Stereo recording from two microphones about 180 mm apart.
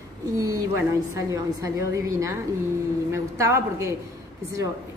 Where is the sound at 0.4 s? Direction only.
20° right (ahead or behind).